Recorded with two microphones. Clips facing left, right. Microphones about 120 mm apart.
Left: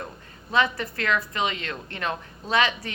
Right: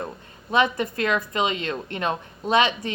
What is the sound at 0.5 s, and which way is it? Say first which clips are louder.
A woman's voice: right 3 dB; 20° right (ahead or behind).